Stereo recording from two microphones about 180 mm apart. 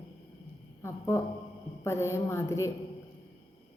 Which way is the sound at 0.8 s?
15° left (ahead or behind).